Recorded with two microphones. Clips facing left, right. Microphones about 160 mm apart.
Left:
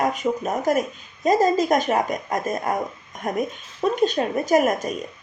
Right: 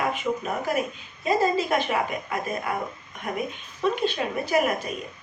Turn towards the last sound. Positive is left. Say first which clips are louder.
# left 5 dB
turn(degrees=45)  # may be behind; listen again after turning